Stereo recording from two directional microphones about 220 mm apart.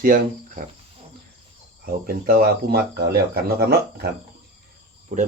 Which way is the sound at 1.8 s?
40° right (ahead or behind).